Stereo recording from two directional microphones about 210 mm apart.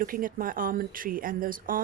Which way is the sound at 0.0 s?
40° right (ahead or behind).